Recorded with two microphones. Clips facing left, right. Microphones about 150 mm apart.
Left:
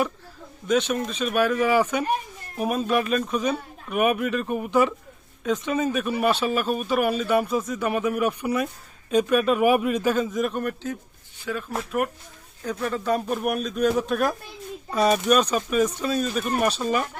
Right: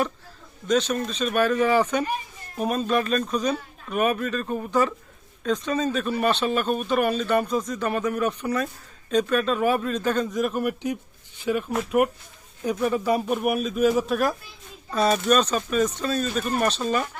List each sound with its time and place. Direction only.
0.7 s speech: 10° left (ahead or behind); by 10.9 s 10° right (ahead or behind)
11.4 s speech: 20° right (ahead or behind)
11.9 s speech: 10° right (ahead or behind)
14.8 s speech: 10° left (ahead or behind)